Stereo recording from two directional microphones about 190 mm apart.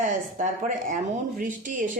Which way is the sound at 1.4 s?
45° right (ahead or behind).